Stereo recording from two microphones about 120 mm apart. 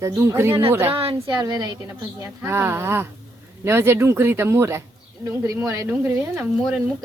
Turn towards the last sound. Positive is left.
turn(degrees=-10)  # may be behind; listen again after turning